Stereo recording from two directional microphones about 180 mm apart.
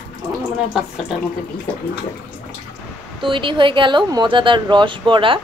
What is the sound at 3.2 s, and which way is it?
Speech, 30° right (ahead or behind).